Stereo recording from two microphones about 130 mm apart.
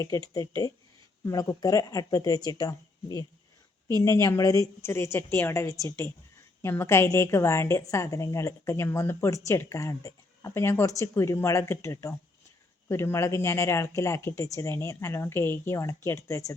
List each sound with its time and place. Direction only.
0.3 s a woman's voice: 25° left (ahead or behind)